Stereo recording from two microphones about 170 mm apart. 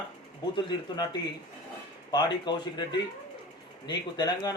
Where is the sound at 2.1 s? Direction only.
25° left (ahead or behind).